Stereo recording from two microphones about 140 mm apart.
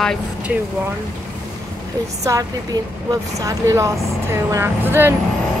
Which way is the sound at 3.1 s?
20° right (ahead or behind).